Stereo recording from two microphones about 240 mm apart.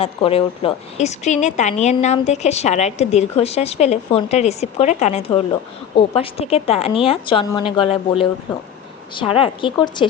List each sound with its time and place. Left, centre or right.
0.0 s a woman's voice: left